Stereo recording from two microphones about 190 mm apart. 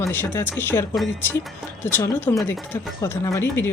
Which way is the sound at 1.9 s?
10° left (ahead or behind).